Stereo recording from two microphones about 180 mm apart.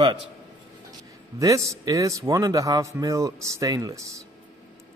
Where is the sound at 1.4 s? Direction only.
15° right (ahead or behind).